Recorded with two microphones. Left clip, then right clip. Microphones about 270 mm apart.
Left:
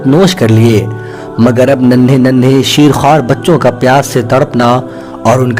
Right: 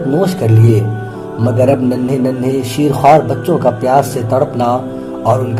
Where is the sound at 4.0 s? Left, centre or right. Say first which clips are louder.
Left 4 dB; left.